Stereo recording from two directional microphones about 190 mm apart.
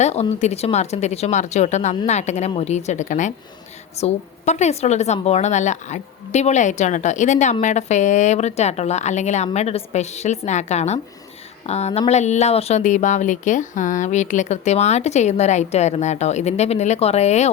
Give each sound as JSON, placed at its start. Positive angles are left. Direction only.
{"t": 0.0, "sound": "a woman's voice", "side_deg": 35}